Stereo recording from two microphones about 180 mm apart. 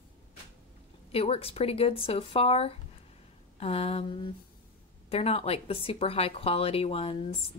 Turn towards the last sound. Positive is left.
turn(degrees=35)  # may be behind; listen again after turning